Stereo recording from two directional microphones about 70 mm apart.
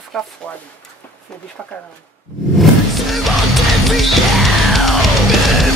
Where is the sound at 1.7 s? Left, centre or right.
Centre.